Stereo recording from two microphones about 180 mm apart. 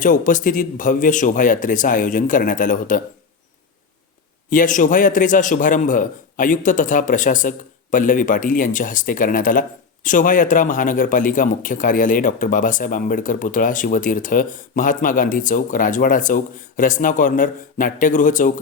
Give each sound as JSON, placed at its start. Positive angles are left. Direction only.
{"t": 0.0, "sound": "a man's voice", "side_deg": 45}
{"t": 4.4, "sound": "a man's voice", "side_deg": 45}